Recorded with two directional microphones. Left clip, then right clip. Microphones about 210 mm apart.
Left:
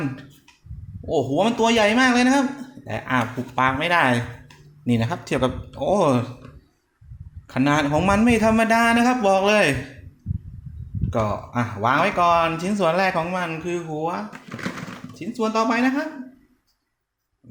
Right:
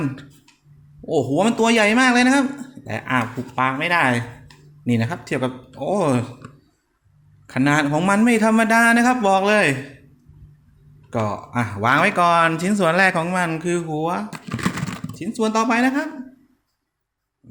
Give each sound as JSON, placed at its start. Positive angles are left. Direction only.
{"t": 1.0, "sound": "speech", "side_deg": -25}
{"t": 7.4, "sound": "speech", "side_deg": -10}
{"t": 11.1, "sound": "speech", "side_deg": -10}
{"t": 14.3, "sound": "a sound", "side_deg": -50}
{"t": 15.1, "sound": "speech", "side_deg": -25}